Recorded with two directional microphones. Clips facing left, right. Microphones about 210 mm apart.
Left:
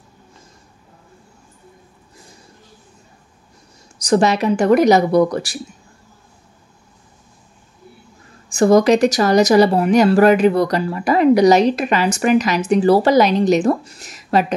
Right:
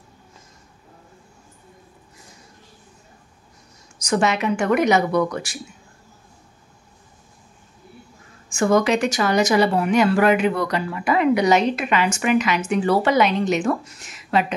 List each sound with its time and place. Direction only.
4.0 s speech: 35° left (ahead or behind)
8.5 s speech: 35° left (ahead or behind)